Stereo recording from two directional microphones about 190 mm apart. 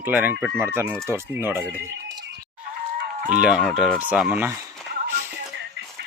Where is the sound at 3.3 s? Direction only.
5° right (ahead or behind).